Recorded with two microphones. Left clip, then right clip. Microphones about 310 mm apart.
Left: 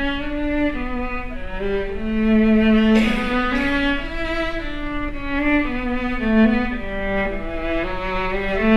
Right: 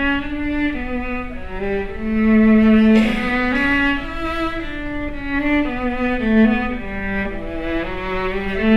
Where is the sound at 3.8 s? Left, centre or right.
Right.